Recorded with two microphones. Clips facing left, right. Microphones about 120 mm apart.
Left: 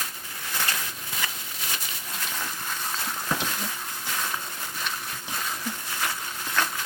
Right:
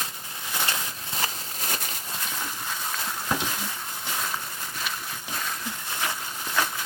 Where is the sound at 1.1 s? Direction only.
35° right (ahead or behind).